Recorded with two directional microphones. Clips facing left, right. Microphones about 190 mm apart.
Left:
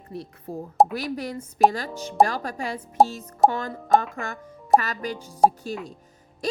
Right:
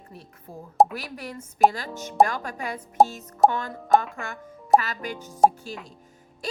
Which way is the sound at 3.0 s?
Centre (ahead or behind).